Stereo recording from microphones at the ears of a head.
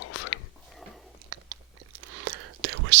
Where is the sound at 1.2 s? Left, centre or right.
Right.